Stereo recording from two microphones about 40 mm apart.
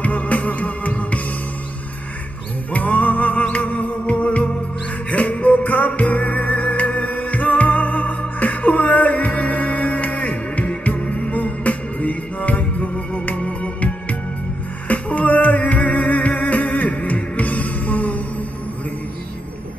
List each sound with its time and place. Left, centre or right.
0.0 s music: left
2.7 s music: left
14.9 s music: left